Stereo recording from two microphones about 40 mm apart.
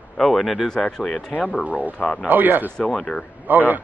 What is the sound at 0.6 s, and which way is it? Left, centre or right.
Speech, centre.